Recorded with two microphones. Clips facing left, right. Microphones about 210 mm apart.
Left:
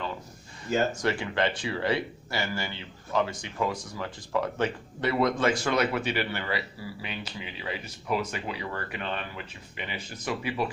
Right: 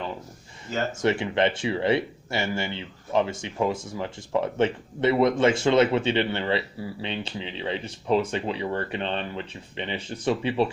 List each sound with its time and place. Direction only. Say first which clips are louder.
0.9 s speech: right 5 dB; 25° right (ahead or behind)